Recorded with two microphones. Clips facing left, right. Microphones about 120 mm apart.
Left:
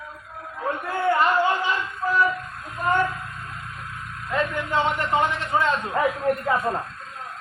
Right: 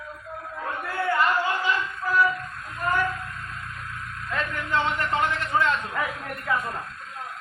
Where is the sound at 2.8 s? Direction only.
20° left (ahead or behind).